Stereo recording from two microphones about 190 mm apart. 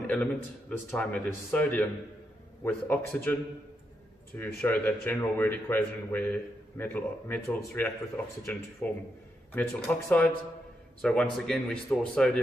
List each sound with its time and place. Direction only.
0.0 s a man's voice: 5° left (ahead or behind)
4.4 s a man's voice: 10° left (ahead or behind)